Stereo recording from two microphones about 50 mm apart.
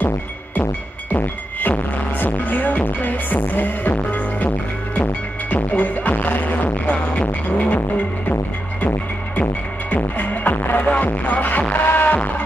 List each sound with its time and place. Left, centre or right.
1.1 s music: left
5.5 s music: left
8.8 s music: left